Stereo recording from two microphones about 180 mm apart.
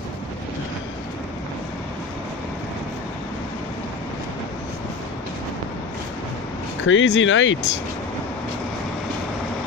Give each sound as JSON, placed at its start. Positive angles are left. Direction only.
{"t": 6.9, "sound": "speech", "side_deg": 90}